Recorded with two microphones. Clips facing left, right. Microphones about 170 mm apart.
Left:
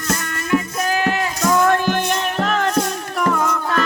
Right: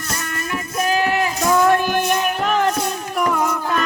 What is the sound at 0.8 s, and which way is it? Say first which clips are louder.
Music: right 1 dB; 15° right (ahead or behind).